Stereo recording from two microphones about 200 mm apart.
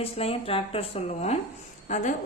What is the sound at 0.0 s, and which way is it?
A woman's voice, 30° left (ahead or behind).